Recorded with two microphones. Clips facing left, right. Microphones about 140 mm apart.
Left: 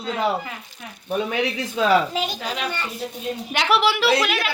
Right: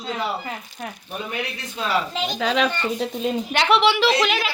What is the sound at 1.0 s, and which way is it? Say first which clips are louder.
Speech: left 8 dB; 90° left.